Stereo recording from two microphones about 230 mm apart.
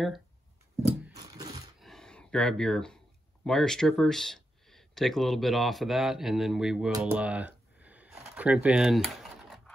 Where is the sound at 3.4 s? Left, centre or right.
Centre.